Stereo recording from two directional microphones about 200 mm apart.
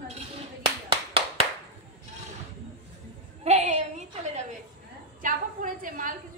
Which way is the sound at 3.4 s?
35° right (ahead or behind).